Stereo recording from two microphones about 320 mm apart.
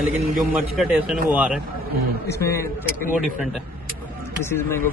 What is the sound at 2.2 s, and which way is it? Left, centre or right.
Speech, centre.